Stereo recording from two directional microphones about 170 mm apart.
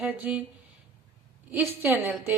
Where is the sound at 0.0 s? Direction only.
5° right (ahead or behind).